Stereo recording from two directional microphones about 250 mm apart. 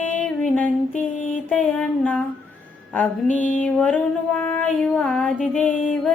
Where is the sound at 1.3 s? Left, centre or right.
Centre.